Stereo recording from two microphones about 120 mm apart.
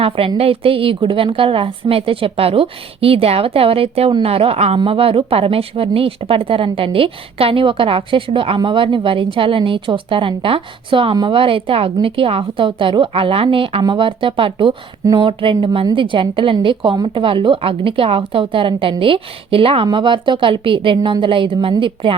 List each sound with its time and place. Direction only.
0.0 s a woman's voice: 50° right (ahead or behind)